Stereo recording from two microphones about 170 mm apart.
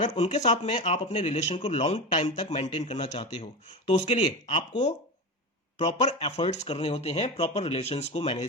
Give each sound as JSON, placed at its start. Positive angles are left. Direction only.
{"t": 0.0, "sound": "speech", "side_deg": 45}